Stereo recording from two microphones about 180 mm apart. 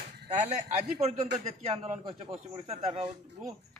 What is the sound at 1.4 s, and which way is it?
Speech, 35° right (ahead or behind).